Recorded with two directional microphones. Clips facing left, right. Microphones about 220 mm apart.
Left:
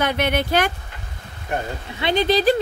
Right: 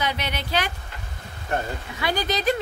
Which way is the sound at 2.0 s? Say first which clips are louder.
Left 7 dB; 25° left (ahead or behind).